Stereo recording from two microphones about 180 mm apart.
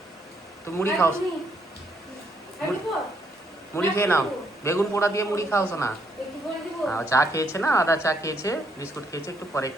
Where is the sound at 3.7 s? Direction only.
15° left (ahead or behind).